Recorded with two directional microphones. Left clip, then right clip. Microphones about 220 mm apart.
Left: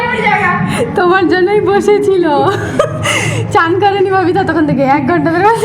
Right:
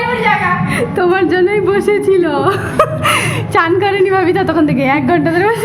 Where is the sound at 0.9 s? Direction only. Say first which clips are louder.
Left 3 dB; 10° right (ahead or behind).